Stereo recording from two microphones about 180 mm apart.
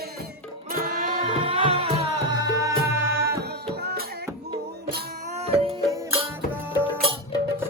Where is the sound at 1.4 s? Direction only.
30° right (ahead or behind).